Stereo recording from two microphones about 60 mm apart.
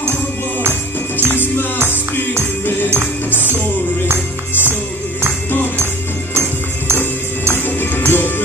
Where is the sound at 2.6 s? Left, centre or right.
Left.